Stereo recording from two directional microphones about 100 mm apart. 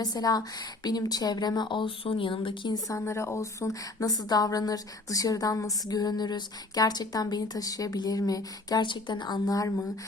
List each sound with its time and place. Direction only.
0.0 s a woman's voice: 40° left (ahead or behind); by 2.7 s 60° left (ahead or behind)
2.7 s a woman's voice: 30° left (ahead or behind)